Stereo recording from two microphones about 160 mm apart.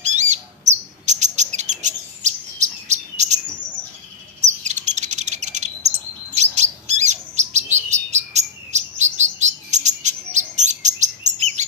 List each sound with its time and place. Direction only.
0.0 s bird: 45° right (ahead or behind)
4.6 s bird: 45° right (ahead or behind)
6.3 s chirp: 45° right (ahead or behind)